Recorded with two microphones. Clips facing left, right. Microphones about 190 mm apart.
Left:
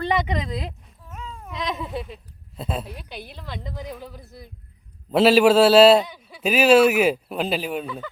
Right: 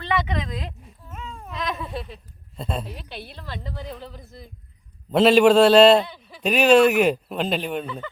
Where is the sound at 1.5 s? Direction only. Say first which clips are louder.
Left 1 dB; 15° left (ahead or behind).